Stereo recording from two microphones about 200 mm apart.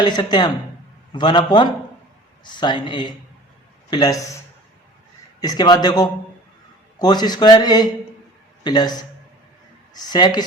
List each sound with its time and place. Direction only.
0.0 s a man's voice: 20° left (ahead or behind)
5.4 s speech: 20° left (ahead or behind)